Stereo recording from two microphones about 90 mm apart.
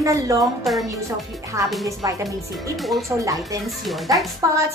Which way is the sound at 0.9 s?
35° right (ahead or behind).